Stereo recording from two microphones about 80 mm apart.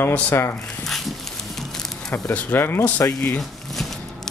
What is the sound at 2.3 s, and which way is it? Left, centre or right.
Speech, left.